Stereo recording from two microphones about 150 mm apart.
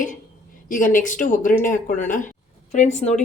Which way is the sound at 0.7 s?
60° left (ahead or behind).